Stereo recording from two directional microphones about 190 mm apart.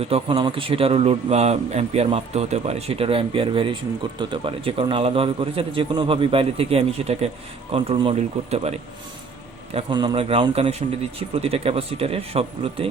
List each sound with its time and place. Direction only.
0.0 s a man's voice: 30° right (ahead or behind)
9.7 s a man's voice: 25° right (ahead or behind)